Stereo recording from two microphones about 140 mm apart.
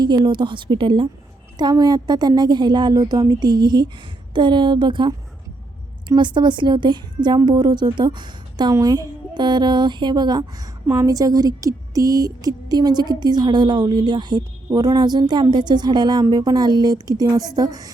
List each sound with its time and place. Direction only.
0.2 s speech: 35° right (ahead or behind)